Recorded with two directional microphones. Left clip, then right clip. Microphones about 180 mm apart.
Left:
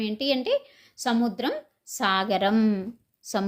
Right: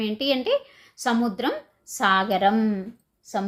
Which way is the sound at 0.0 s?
5° left (ahead or behind).